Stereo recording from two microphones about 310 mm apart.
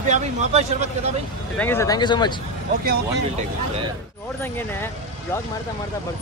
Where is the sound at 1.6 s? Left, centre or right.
Centre.